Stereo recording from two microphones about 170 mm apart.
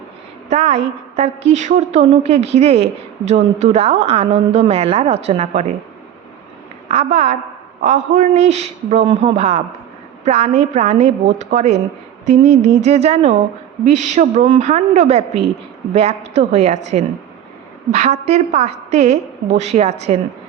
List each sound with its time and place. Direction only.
0.5 s a woman's voice: 40° right (ahead or behind)
6.8 s a woman's voice: 40° right (ahead or behind)